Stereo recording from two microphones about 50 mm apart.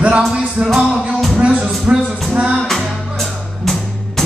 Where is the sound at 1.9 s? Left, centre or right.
Right.